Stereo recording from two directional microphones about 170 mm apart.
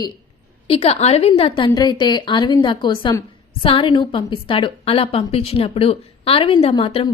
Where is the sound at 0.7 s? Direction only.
35° left (ahead or behind).